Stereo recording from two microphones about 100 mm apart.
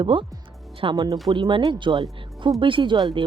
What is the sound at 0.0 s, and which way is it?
Speech, 55° right (ahead or behind).